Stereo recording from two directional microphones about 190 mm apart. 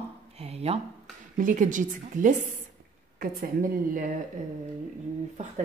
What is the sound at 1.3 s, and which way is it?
A woman's voice, 45° right (ahead or behind).